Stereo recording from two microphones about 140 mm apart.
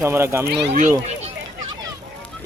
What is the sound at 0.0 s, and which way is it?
Speech, 20° right (ahead or behind).